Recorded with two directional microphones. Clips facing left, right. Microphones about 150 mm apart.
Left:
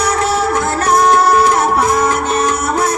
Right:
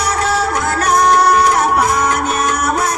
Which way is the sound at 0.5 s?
30° left (ahead or behind).